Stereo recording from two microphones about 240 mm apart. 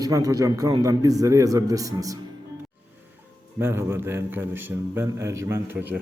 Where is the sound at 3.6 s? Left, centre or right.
Centre.